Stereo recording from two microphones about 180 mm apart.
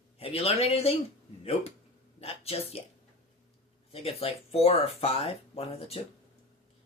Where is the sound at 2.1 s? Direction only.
35° left (ahead or behind).